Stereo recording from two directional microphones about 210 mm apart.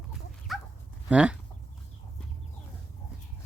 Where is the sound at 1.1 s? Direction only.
5° right (ahead or behind).